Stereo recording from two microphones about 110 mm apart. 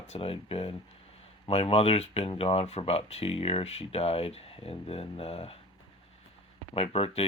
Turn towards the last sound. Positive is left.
turn(degrees=65)  # may be behind; listen again after turning